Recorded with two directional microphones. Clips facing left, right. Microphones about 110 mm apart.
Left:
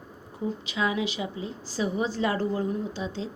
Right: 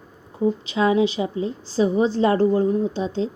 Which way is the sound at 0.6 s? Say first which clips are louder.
Right 8 dB; 35° right (ahead or behind).